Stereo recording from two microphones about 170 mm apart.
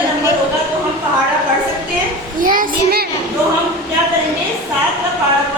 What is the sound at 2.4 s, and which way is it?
Child singing, 55° right (ahead or behind).